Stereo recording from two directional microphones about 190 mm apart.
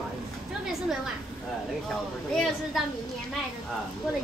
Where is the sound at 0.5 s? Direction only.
Centre (ahead or behind).